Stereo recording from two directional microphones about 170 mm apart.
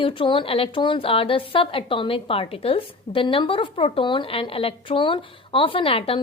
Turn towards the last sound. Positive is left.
turn(degrees=35)  # may be behind; listen again after turning